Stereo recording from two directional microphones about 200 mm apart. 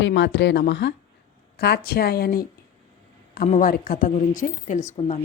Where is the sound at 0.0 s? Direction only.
65° left (ahead or behind); by 5.2 s 35° left (ahead or behind).